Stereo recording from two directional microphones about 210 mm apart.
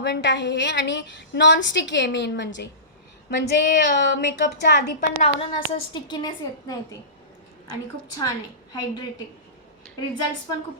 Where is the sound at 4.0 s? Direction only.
55° left (ahead or behind).